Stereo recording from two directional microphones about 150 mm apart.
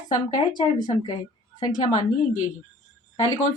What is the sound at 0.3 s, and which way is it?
Speech, 30° left (ahead or behind).